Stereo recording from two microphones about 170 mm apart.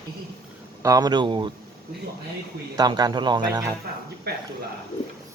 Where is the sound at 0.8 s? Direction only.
20° right (ahead or behind).